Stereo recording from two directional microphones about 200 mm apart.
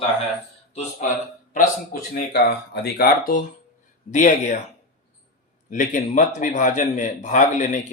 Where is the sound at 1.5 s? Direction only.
45° left (ahead or behind).